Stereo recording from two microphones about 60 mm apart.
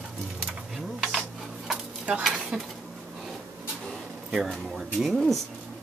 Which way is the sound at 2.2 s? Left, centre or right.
Centre.